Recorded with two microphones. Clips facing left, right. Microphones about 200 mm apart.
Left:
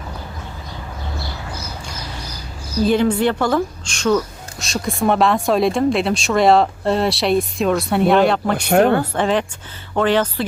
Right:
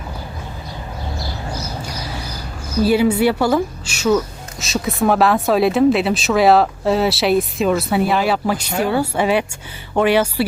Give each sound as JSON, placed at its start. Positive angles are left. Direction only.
{"t": 2.8, "sound": "a woman's voice", "side_deg": -10}
{"t": 8.5, "sound": "speech", "side_deg": 60}
{"t": 8.9, "sound": "a woman's voice", "side_deg": -10}